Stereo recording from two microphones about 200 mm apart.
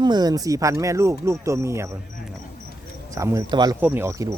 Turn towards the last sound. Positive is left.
turn(degrees=-15)  # may be behind; listen again after turning